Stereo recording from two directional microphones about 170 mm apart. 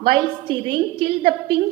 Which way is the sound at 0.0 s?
30° right (ahead or behind).